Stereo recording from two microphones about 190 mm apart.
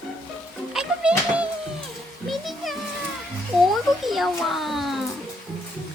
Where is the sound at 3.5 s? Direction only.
Centre (ahead or behind).